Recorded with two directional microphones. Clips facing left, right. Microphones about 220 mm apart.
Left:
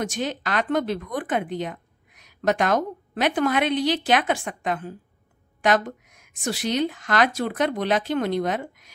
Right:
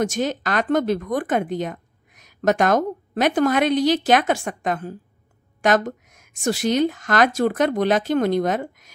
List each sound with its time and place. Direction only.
0.1 s a woman's voice: 45° right (ahead or behind)